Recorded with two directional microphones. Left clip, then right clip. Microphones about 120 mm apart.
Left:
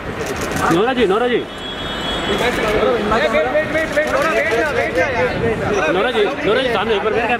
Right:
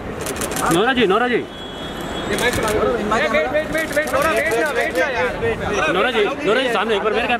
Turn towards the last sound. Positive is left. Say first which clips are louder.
# left 2 dB
turn(degrees=-45)  # may be behind; listen again after turning